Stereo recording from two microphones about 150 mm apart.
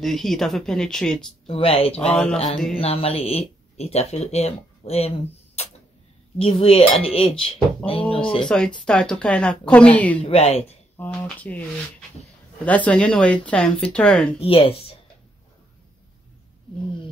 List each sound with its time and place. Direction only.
0.0 s speech: centre (ahead or behind)
1.5 s speech: 40° left (ahead or behind)
2.0 s a woman's voice: 10° left (ahead or behind)
2.3 s speech: 55° left (ahead or behind)
2.8 s speech: 40° left (ahead or behind)
6.3 s speech: 40° left (ahead or behind)
8.5 s a woman's voice: 5° left (ahead or behind)
10.2 s speech: 45° left (ahead or behind)
11.0 s a woman's voice: 10° left (ahead or behind)
12.6 s a woman's voice: 10° left (ahead or behind)
14.4 s speech: 40° left (ahead or behind)